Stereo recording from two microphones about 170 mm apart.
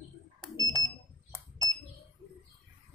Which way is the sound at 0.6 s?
20° right (ahead or behind).